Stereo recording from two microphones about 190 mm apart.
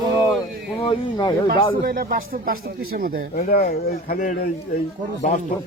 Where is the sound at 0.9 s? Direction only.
25° left (ahead or behind).